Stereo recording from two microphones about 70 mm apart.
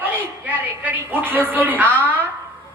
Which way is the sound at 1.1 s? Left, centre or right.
Right.